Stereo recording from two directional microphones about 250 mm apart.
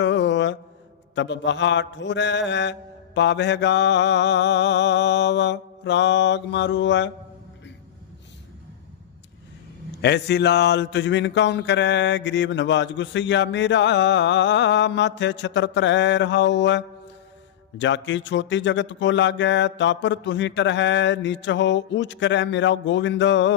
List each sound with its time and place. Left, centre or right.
0.0 s mantra: left
10.0 s mantra: left